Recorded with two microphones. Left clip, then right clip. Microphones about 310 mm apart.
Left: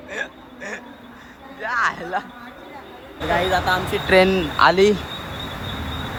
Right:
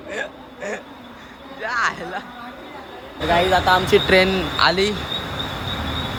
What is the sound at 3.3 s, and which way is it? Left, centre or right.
Speech, centre.